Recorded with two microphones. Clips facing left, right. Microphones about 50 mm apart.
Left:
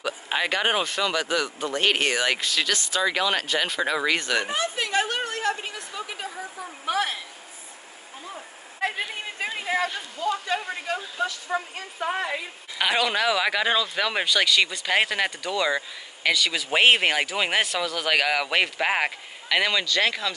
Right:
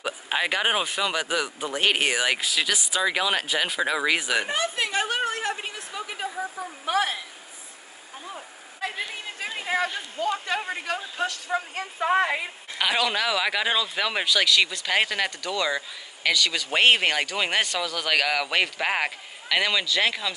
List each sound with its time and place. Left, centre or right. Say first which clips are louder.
0.3 s speech: even; centre
5.3 s a sound: left 2 dB; centre
9.7 s speech: even; centre
10.1 s a woman's voice: even; right
12.7 s speech: left 1 dB; centre